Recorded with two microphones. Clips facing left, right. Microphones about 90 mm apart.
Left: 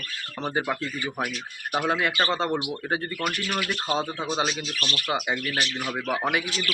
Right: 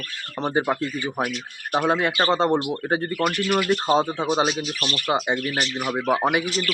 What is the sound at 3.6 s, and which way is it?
Speech, 30° right (ahead or behind).